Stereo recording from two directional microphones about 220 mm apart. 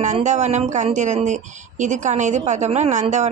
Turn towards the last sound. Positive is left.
turn(degrees=-30)  # may be behind; listen again after turning